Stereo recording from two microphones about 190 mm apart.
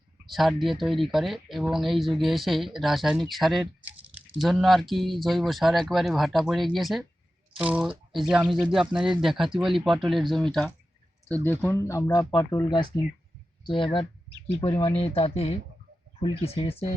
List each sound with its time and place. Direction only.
0.3 s speech: centre (ahead or behind); by 16.7 s 30° left (ahead or behind)